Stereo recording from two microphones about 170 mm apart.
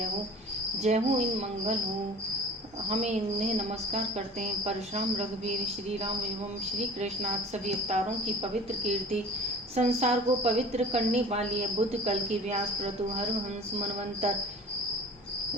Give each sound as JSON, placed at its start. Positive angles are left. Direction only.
{"t": 0.8, "sound": "a woman's voice", "side_deg": -40}
{"t": 2.9, "sound": "a woman's voice", "side_deg": -40}
{"t": 4.6, "sound": "a woman's voice", "side_deg": -40}
{"t": 6.7, "sound": "a woman's voice", "side_deg": -40}
{"t": 9.7, "sound": "a woman's voice", "side_deg": -40}